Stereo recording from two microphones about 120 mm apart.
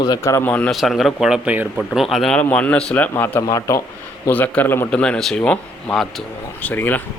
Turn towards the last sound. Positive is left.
turn(degrees=15)  # may be behind; listen again after turning